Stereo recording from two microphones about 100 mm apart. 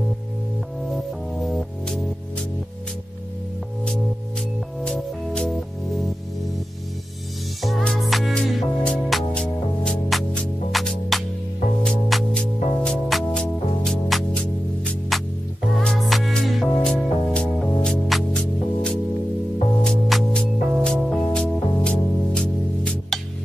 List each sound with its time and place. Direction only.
1.4 s music: centre (ahead or behind)
4.8 s music: 10° left (ahead or behind)
7.6 s music: 5° left (ahead or behind)